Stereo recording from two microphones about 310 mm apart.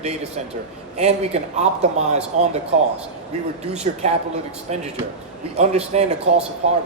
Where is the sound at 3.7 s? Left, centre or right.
Right.